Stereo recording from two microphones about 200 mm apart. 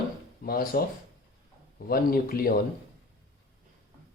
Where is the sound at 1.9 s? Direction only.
45° left (ahead or behind).